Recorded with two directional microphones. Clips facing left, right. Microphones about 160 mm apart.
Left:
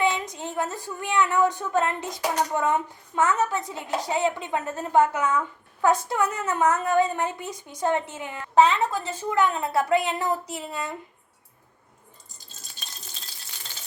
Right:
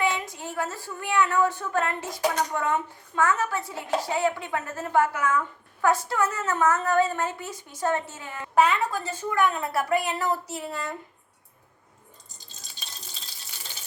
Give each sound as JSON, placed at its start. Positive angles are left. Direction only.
{"t": 0.0, "sound": "a woman's voice", "side_deg": 20}